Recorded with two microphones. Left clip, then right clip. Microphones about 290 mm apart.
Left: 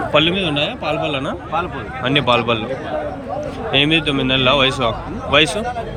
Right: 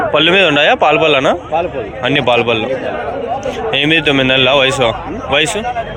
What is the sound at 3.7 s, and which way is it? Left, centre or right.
A man's voice, centre.